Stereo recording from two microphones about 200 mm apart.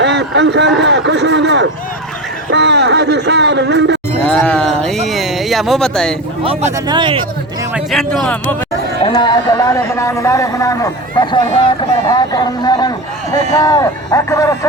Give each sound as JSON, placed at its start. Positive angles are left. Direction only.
{"t": 0.0, "sound": "speech", "side_deg": -60}
{"t": 4.3, "sound": "speech", "side_deg": 5}
{"t": 6.4, "sound": "speech", "side_deg": -30}
{"t": 7.7, "sound": "speech", "side_deg": 0}
{"t": 9.0, "sound": "speech", "side_deg": 25}
{"t": 12.0, "sound": "a sound", "side_deg": 20}
{"t": 13.6, "sound": "speech", "side_deg": 20}